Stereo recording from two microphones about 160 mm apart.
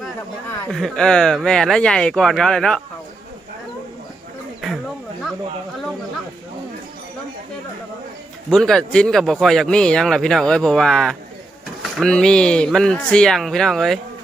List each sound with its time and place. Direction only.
0.7 s speech: centre (ahead or behind)
8.4 s speech: 5° left (ahead or behind)